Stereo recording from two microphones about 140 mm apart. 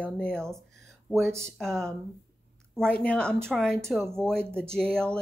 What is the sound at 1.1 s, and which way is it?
Speech, 20° right (ahead or behind).